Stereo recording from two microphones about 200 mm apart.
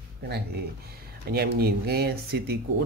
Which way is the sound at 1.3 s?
50° right (ahead or behind).